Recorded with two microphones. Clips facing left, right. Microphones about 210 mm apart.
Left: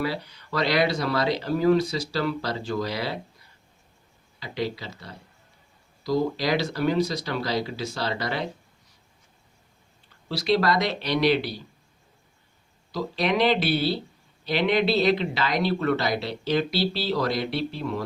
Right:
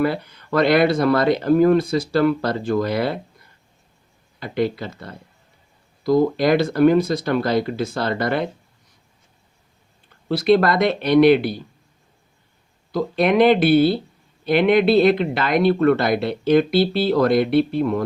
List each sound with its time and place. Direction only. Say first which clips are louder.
0.0 s speech: right 8 dB; 55° right (ahead or behind)
10.2 s speech: right 7 dB; 55° right (ahead or behind)
12.9 s speech: right 7 dB; 55° right (ahead or behind)